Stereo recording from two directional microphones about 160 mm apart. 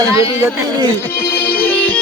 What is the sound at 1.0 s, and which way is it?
Music, 15° left (ahead or behind).